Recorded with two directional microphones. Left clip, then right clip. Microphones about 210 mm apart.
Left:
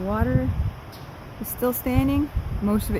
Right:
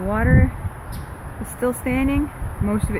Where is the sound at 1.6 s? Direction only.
15° left (ahead or behind).